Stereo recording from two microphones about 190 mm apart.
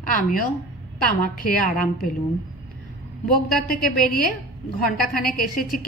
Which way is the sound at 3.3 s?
50° left (ahead or behind).